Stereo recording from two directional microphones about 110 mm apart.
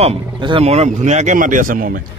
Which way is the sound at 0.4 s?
50° right (ahead or behind).